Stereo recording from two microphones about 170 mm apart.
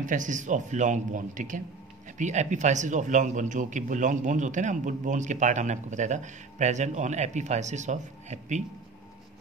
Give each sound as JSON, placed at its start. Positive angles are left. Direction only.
{"t": 0.0, "sound": "a man's voice", "side_deg": -50}